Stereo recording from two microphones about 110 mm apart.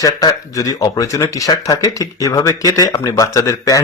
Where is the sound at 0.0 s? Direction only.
35° left (ahead or behind).